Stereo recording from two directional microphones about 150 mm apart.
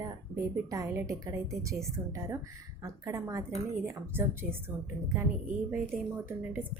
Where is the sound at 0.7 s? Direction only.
20° right (ahead or behind).